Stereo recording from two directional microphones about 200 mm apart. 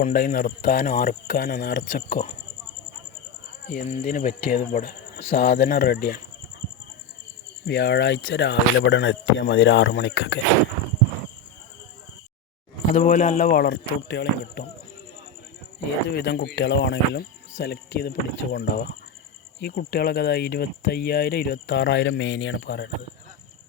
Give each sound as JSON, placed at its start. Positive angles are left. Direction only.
{"t": 0.0, "sound": "speech", "side_deg": 50}
{"t": 3.7, "sound": "speech", "side_deg": 45}
{"t": 7.6, "sound": "speech", "side_deg": 55}
{"t": 12.9, "sound": "a man's voice", "side_deg": 40}
{"t": 13.7, "sound": "speech", "side_deg": 60}
{"t": 16.0, "sound": "speech", "side_deg": 60}
{"t": 19.9, "sound": "speech", "side_deg": 55}